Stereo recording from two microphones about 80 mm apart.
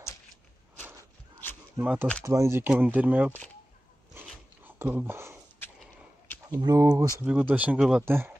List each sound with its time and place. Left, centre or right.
1.8 s speech: right
2.2 s speech: right
2.6 s speech: right
4.6 s a sound: right
6.6 s speech: right
7.2 s speech: centre